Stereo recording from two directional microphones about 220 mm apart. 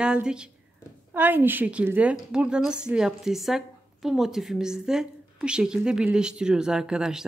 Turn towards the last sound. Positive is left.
turn(degrees=-5)  # may be behind; listen again after turning